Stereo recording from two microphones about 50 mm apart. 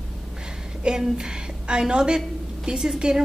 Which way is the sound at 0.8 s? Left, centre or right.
Centre.